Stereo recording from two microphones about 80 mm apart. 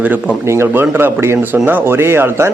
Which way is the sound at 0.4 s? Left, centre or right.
Right.